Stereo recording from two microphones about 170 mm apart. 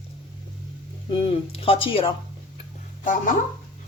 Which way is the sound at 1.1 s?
35° left (ahead or behind).